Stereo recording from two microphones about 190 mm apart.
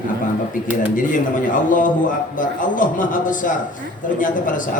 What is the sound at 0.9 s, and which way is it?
A man's voice, 45° left (ahead or behind).